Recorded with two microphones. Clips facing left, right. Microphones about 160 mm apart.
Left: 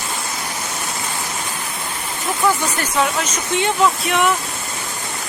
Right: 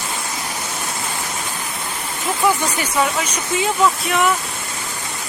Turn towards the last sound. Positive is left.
turn(degrees=0)  # may be behind; listen again after turning